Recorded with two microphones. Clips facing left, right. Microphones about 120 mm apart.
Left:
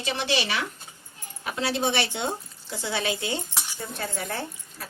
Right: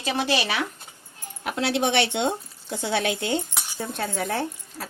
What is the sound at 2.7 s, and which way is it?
Speech, 60° right (ahead or behind).